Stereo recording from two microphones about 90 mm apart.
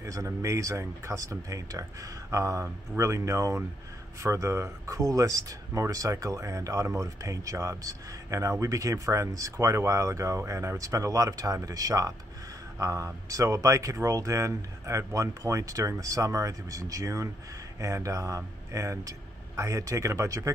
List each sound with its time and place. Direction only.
0.0 s speech: 35° right (ahead or behind)